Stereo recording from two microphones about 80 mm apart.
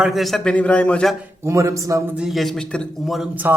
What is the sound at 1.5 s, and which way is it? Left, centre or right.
Speech, right.